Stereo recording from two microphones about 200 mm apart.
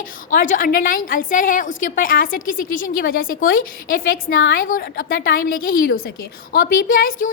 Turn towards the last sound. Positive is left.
turn(degrees=45)  # may be behind; listen again after turning